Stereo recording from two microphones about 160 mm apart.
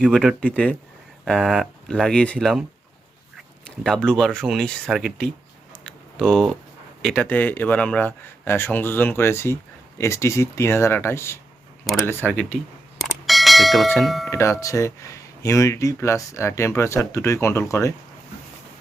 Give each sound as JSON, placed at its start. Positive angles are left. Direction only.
{"t": 0.1, "sound": "speech", "side_deg": 0}
{"t": 3.8, "sound": "speech", "side_deg": 5}
{"t": 5.8, "sound": "a sound", "side_deg": 0}
{"t": 7.0, "sound": "speech", "side_deg": 5}
{"t": 13.0, "sound": "bell", "side_deg": 0}
{"t": 14.0, "sound": "speech", "side_deg": 0}
{"t": 14.3, "sound": "speech", "side_deg": 15}